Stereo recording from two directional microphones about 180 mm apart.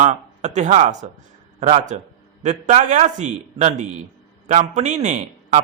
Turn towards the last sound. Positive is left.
turn(degrees=-40)  # may be behind; listen again after turning